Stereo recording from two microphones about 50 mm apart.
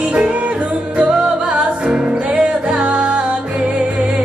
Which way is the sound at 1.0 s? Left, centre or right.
Right.